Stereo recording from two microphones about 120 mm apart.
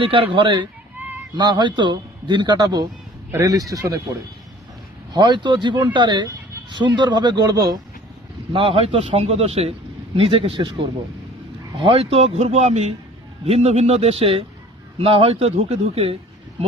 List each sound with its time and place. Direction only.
0.0 s a man's voice: 50° right (ahead or behind); by 4.0 s 30° right (ahead or behind)
5.1 s a man's voice: 40° right (ahead or behind)
8.5 s a man's voice: 50° right (ahead or behind)